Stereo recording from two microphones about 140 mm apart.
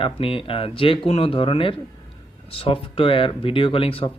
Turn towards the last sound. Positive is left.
turn(degrees=40)  # may be behind; listen again after turning